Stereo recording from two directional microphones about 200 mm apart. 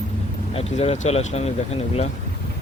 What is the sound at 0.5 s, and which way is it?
Speech, 30° left (ahead or behind).